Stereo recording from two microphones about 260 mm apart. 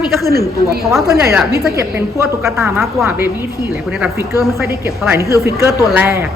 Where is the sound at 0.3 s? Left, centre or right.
Right.